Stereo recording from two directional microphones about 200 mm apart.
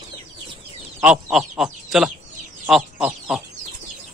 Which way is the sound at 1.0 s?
Centre (ahead or behind).